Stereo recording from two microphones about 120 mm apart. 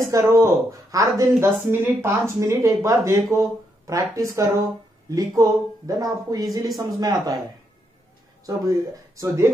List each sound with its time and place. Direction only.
0.0 s speech: 25° right (ahead or behind)
8.5 s speech: 25° right (ahead or behind)